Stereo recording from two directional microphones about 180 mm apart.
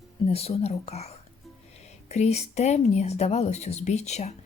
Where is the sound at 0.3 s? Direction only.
35° left (ahead or behind).